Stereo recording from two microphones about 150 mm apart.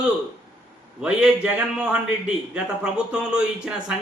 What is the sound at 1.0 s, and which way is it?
A man's voice, 5° right (ahead or behind).